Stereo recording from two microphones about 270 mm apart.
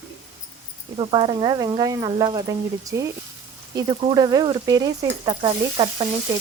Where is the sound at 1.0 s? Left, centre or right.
Centre.